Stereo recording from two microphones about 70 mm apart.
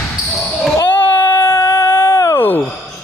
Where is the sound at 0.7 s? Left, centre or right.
Left.